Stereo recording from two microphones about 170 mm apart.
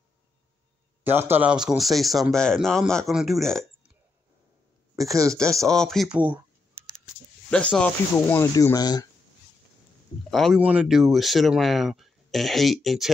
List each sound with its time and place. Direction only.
1.0 s speech: 10° right (ahead or behind)
5.6 s speech: 5° left (ahead or behind)
7.4 s speech: 5° left (ahead or behind); by 9.0 s 25° left (ahead or behind)
10.3 s speech: centre (ahead or behind)